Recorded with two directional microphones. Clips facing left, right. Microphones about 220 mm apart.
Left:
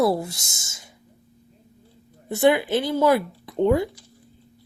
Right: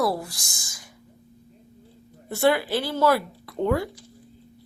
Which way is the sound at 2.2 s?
20° left (ahead or behind).